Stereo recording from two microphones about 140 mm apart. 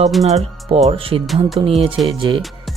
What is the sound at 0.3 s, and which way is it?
Speech, 50° right (ahead or behind).